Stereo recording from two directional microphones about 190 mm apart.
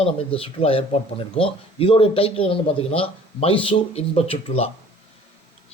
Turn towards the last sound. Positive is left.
turn(degrees=30)  # may be behind; listen again after turning